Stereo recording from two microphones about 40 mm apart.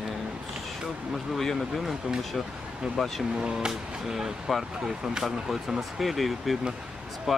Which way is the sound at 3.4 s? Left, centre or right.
Centre.